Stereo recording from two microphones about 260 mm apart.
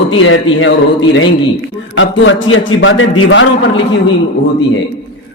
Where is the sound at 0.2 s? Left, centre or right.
Left.